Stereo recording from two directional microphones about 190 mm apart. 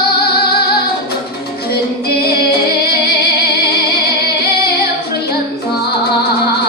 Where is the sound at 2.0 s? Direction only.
55° left (ahead or behind).